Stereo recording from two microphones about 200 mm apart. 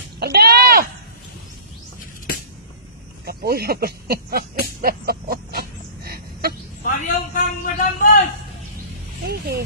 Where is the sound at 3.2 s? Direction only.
50° right (ahead or behind).